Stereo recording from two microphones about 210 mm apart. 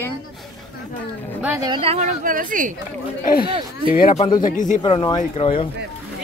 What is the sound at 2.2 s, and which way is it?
Speech, 40° right (ahead or behind).